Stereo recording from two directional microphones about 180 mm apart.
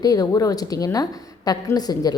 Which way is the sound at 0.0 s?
20° left (ahead or behind).